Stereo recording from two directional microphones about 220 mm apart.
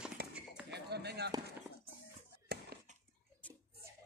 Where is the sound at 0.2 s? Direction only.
45° right (ahead or behind).